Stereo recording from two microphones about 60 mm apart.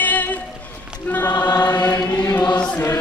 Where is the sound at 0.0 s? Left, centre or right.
Left.